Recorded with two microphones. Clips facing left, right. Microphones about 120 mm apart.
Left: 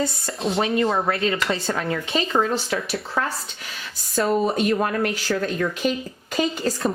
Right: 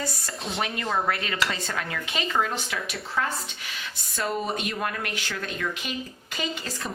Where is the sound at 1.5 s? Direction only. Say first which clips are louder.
Left 7 dB; 30° left (ahead or behind).